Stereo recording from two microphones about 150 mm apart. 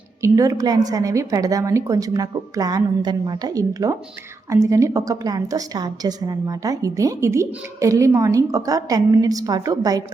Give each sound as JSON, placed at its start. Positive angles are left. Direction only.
{"t": 0.2, "sound": "a woman's voice", "side_deg": -20}